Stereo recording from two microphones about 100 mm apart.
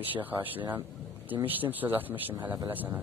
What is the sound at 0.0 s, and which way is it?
Speech, 20° right (ahead or behind).